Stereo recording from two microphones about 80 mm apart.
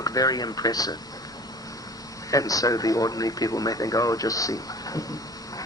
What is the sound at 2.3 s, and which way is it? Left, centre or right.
Speech, left.